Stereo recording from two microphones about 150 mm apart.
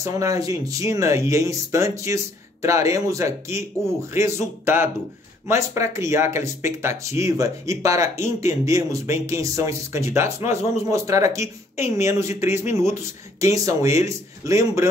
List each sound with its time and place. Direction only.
0.0 s speech: 20° right (ahead or behind)